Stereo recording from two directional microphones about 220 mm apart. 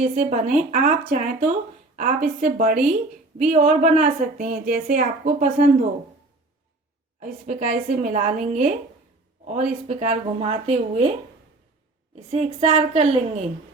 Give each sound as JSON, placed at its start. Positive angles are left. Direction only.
{"t": 0.0, "sound": "a woman's voice", "side_deg": -35}
{"t": 7.2, "sound": "a woman's voice", "side_deg": -35}
{"t": 12.1, "sound": "a woman's voice", "side_deg": -30}